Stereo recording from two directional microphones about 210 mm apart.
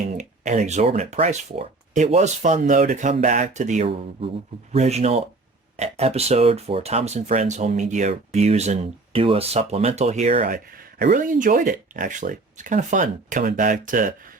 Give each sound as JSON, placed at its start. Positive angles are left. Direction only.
{"t": 0.1, "sound": "speech", "side_deg": -35}